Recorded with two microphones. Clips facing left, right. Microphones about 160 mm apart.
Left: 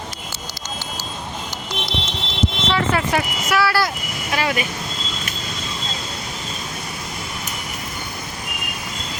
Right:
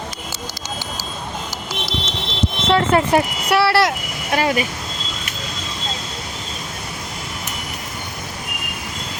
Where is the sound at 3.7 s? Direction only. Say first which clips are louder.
Right 4 dB; 75° right (ahead or behind).